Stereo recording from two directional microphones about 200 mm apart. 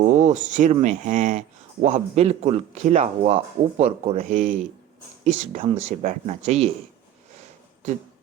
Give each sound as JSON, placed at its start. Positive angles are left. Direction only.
{"t": 0.1, "sound": "speech", "side_deg": -40}